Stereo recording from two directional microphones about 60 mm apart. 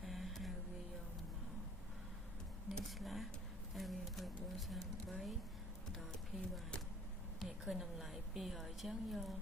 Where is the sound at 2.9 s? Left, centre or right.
Centre.